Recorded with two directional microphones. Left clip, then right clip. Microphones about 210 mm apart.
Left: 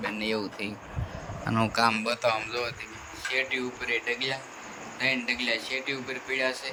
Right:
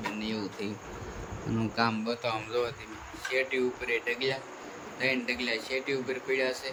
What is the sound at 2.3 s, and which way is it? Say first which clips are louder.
Speech: left 2 dB; 10° right (ahead or behind).